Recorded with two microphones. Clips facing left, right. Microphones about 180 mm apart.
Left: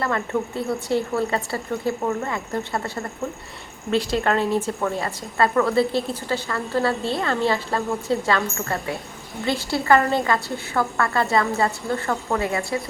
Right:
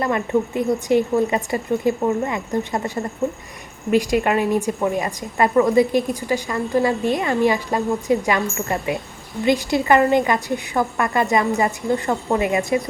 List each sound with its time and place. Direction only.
0.0 s a woman's voice: 20° right (ahead or behind)